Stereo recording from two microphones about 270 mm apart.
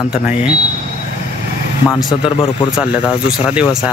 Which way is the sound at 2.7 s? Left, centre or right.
Centre.